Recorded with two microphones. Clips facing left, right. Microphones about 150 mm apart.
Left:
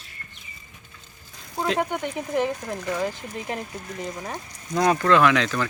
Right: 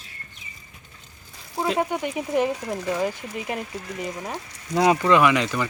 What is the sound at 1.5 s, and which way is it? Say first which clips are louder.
Speech: right 1 dB; 5° right (ahead or behind).